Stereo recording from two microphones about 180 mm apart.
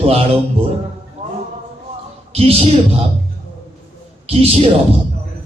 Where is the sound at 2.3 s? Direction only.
35° right (ahead or behind).